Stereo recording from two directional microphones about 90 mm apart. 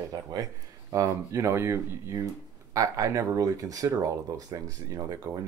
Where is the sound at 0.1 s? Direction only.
45° right (ahead or behind).